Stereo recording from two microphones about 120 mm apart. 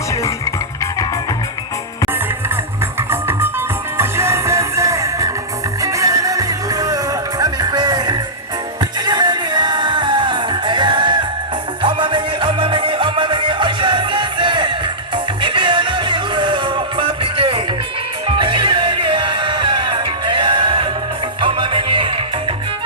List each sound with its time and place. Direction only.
3.1 s music: 20° right (ahead or behind); by 22.5 s 45° right (ahead or behind)